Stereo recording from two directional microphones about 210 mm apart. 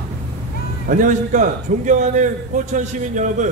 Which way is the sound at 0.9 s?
40° right (ahead or behind).